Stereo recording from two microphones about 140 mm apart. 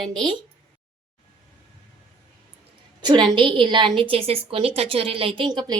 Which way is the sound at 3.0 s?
35° right (ahead or behind).